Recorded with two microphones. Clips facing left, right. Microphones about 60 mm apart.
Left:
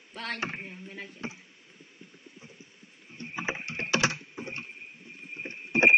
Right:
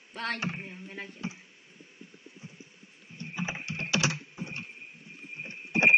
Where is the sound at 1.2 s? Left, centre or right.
Left.